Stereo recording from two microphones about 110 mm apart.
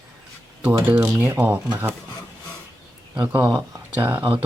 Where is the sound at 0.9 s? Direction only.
25° right (ahead or behind).